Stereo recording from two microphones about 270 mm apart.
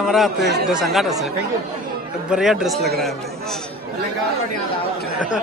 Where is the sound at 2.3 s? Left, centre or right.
Centre.